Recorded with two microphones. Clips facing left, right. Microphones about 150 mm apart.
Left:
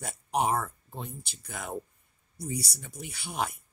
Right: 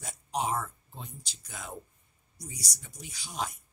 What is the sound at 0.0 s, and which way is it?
Speech, 60° left (ahead or behind).